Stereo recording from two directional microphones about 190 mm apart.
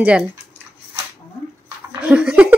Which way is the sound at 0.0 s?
5° right (ahead or behind).